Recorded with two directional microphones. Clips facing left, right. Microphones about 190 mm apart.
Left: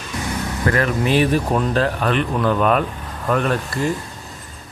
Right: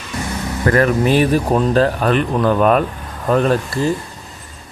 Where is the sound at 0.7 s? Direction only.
45° right (ahead or behind).